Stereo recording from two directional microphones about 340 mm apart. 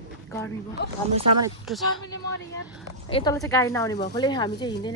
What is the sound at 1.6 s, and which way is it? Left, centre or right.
Speech, centre.